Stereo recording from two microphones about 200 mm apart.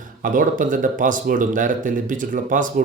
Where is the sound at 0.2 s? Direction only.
40° right (ahead or behind).